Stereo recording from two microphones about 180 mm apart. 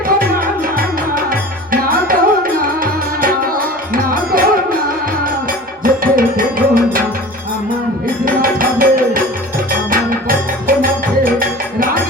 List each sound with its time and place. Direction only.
0.2 s tabla: 55° right (ahead or behind)
3.9 s music: 50° right (ahead or behind)
5.8 s music: 50° right (ahead or behind)
8.2 s music: 50° right (ahead or behind)